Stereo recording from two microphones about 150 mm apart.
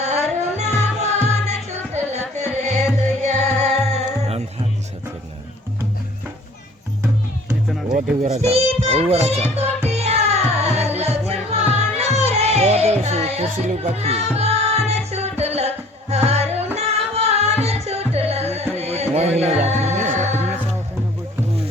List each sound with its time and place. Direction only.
0.0 s music: 45° right (ahead or behind)
8.2 s music: 45° right (ahead or behind)